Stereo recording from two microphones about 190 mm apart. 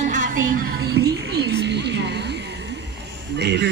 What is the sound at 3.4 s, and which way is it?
Speech, 65° right (ahead or behind).